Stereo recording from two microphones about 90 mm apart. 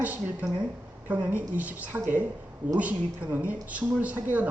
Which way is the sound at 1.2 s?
20° right (ahead or behind).